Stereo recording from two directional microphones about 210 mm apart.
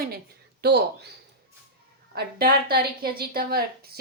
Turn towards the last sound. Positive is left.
turn(degrees=-45)  # may be behind; listen again after turning